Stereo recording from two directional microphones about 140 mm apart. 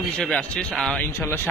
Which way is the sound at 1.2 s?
15° left (ahead or behind).